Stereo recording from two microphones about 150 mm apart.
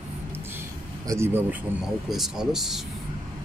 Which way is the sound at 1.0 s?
20° right (ahead or behind).